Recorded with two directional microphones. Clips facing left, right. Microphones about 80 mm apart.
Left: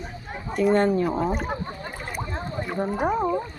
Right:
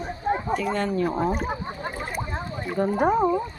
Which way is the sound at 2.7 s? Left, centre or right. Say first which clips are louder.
Right 4 dB; centre.